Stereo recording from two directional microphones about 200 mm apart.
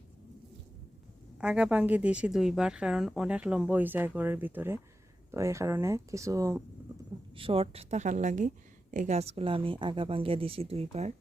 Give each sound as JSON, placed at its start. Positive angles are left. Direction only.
{"t": 1.4, "sound": "a woman's voice", "side_deg": -5}
{"t": 7.3, "sound": "a woman's voice", "side_deg": -25}